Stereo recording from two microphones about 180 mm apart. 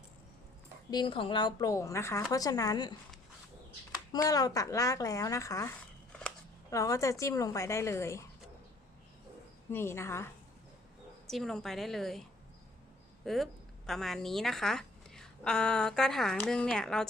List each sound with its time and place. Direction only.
0.9 s speech: 25° left (ahead or behind)
4.1 s speech: 20° left (ahead or behind)
9.7 s speech: 15° left (ahead or behind)
11.3 s a woman's voice: centre (ahead or behind)
13.2 s a woman's voice: centre (ahead or behind)